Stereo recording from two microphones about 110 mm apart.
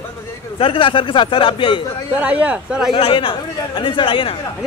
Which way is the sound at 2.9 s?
55° left (ahead or behind).